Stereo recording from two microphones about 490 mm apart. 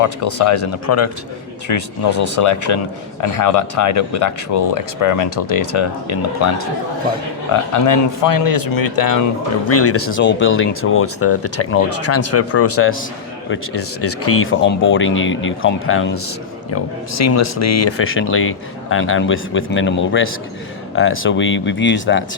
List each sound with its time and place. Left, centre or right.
0.0 s speech: left
7.7 s speech: left
9.6 s speech: left